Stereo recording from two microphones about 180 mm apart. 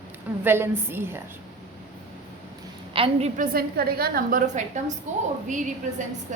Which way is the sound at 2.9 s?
35° right (ahead or behind).